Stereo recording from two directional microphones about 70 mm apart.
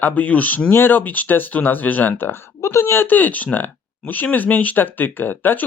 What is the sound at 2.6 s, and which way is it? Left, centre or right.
Speech, left.